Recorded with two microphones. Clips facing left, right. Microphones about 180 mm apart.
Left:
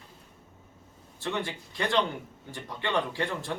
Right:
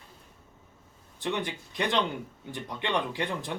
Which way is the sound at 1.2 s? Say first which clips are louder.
Right 1 dB; 20° right (ahead or behind).